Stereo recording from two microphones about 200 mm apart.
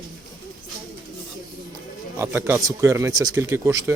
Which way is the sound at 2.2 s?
15° right (ahead or behind).